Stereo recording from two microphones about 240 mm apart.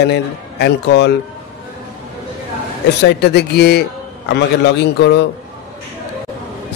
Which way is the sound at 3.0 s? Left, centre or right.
Left.